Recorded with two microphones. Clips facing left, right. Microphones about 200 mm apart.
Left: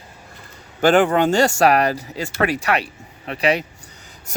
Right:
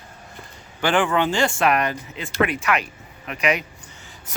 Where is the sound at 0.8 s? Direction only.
40° left (ahead or behind).